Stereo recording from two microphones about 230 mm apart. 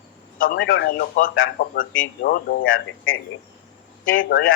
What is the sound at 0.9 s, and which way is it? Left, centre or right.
Speech, left.